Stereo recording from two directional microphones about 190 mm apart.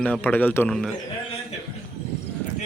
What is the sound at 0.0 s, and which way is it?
Speech, 5° left (ahead or behind).